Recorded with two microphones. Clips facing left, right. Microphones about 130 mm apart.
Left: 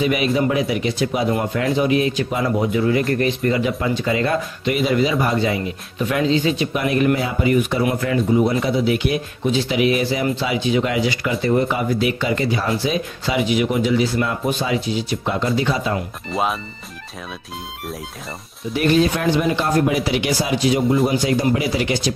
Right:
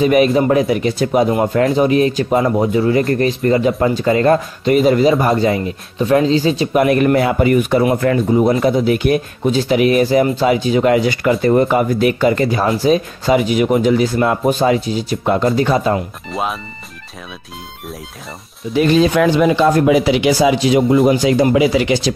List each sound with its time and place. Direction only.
0.0 s speech: 45° right (ahead or behind)
6.8 s speech: 55° right (ahead or behind)
16.3 s speech: centre (ahead or behind)
20.2 s speech: 90° right